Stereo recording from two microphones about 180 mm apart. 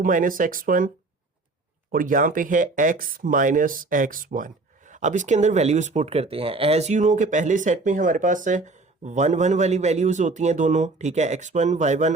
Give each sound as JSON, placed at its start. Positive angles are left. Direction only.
{"t": 0.0, "sound": "speech", "side_deg": -50}
{"t": 1.9, "sound": "speech", "side_deg": -50}